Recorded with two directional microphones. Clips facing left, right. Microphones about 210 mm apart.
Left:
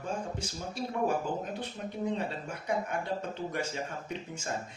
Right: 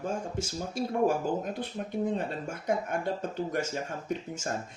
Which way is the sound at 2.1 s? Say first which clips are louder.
Right 2 dB; 45° right (ahead or behind).